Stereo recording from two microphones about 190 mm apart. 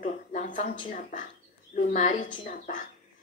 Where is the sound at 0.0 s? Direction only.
40° left (ahead or behind).